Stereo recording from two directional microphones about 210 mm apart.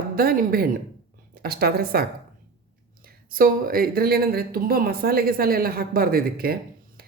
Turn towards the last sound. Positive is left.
turn(degrees=-45)  # may be behind; listen again after turning